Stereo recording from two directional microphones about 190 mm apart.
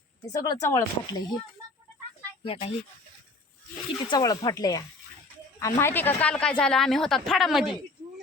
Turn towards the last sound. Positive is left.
turn(degrees=0)  # may be behind; listen again after turning